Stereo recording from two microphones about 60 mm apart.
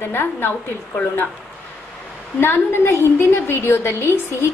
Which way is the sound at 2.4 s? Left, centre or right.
Left.